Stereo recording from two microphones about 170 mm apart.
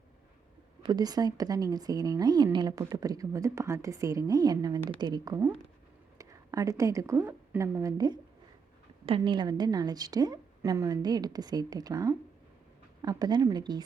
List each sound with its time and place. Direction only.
0.8 s a woman's voice: 25° right (ahead or behind)